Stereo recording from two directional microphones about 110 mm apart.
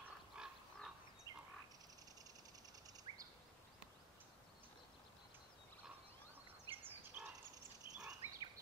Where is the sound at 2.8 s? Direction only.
35° right (ahead or behind).